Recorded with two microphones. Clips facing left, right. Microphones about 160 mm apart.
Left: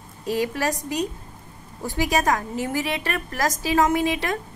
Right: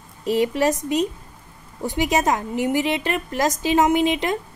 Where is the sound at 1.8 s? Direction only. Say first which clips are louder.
Right 2 dB; 20° right (ahead or behind).